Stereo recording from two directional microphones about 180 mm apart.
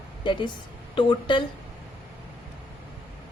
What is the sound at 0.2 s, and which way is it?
A woman's voice, 25° left (ahead or behind).